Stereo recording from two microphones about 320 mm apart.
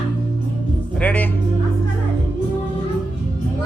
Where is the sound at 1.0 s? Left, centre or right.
Centre.